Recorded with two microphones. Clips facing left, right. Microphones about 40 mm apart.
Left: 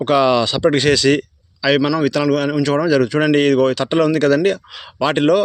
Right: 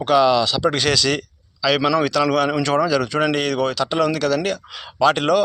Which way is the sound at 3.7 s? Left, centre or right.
Left.